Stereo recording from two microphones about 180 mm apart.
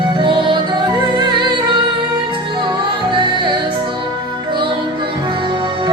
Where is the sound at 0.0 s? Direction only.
25° right (ahead or behind).